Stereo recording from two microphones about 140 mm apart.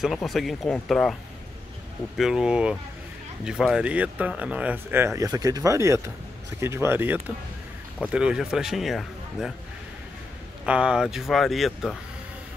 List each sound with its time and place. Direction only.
0.0 s speech: centre (ahead or behind)
2.1 s speech: 5° right (ahead or behind)
10.6 s speech: 5° right (ahead or behind)